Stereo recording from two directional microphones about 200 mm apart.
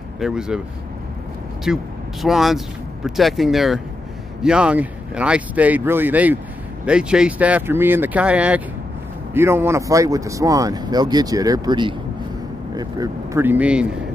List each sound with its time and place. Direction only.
0.2 s speech: 5° right (ahead or behind)
1.7 s speech: 5° right (ahead or behind)